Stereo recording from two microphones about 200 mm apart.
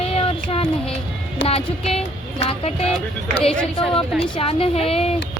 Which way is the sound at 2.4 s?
30° left (ahead or behind).